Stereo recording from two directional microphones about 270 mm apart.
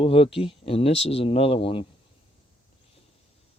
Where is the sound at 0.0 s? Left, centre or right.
Left.